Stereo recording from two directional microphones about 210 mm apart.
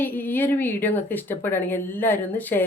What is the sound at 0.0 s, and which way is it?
Speech, 10° left (ahead or behind).